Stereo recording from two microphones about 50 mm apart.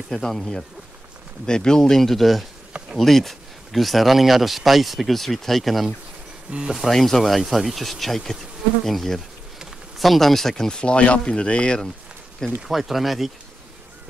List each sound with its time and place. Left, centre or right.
0.1 s speech: centre
1.4 s speech: centre
12.6 s speech: centre